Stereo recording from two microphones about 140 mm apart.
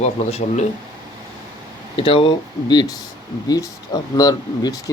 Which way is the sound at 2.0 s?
40° left (ahead or behind).